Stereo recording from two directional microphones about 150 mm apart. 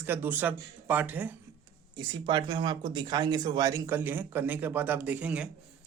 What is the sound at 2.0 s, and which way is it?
Speech, 30° right (ahead or behind).